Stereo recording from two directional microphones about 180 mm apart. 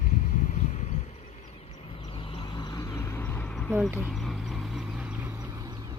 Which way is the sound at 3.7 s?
5° right (ahead or behind).